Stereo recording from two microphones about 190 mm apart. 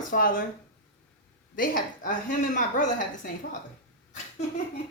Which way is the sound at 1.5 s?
45° left (ahead or behind).